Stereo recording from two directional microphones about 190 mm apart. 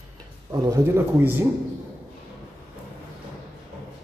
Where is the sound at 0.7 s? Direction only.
10° right (ahead or behind).